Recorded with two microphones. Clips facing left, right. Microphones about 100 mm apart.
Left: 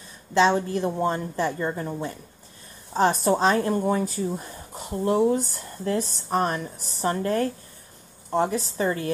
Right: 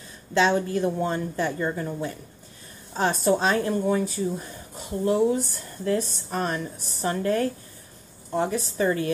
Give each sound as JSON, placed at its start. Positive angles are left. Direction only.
{"t": 0.4, "sound": "a woman's voice", "side_deg": 30}